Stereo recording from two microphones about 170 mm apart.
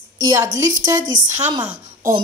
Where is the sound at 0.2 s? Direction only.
20° right (ahead or behind).